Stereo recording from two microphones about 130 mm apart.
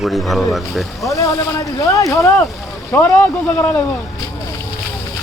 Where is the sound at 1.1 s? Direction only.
25° left (ahead or behind).